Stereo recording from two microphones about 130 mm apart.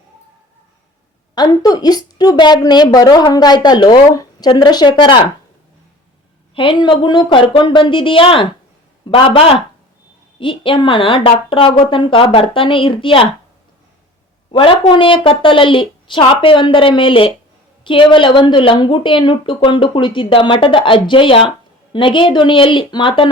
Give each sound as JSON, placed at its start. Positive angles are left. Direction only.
{"t": 1.4, "sound": "a woman's voice", "side_deg": 30}
{"t": 6.5, "sound": "a woman's voice", "side_deg": 40}
{"t": 14.5, "sound": "a woman's voice", "side_deg": 45}